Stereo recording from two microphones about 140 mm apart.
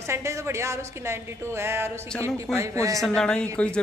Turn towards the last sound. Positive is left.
turn(degrees=5)  # may be behind; listen again after turning